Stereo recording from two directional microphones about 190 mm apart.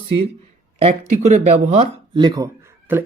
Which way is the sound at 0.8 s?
35° right (ahead or behind).